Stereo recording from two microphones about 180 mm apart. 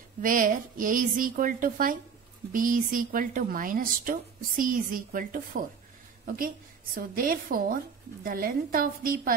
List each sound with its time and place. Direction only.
0.2 s a woman's voice: 50° right (ahead or behind)